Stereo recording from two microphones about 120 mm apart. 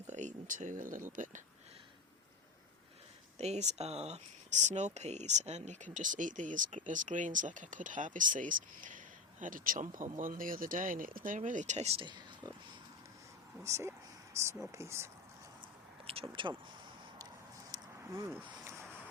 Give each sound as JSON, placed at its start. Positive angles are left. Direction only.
{"t": 0.1, "sound": "speech", "side_deg": -90}
{"t": 3.3, "sound": "speech", "side_deg": -65}
{"t": 11.9, "sound": "speech", "side_deg": -40}
{"t": 13.6, "sound": "speech", "side_deg": -25}
{"t": 16.3, "sound": "speech", "side_deg": -45}
{"t": 17.7, "sound": "a sound", "side_deg": -25}